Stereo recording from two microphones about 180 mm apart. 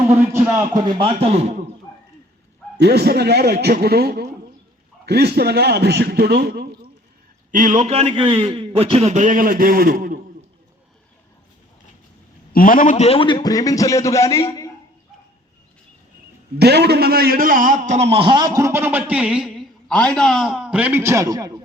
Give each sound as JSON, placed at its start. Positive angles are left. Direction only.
{"t": 0.1, "sound": "a man's voice", "side_deg": -15}
{"t": 0.9, "sound": "a man's voice", "side_deg": -30}
{"t": 2.7, "sound": "a man's voice", "side_deg": -65}
{"t": 7.5, "sound": "a man's voice", "side_deg": -45}
{"t": 12.5, "sound": "a man's voice", "side_deg": 50}
{"t": 16.6, "sound": "a man's voice", "side_deg": -65}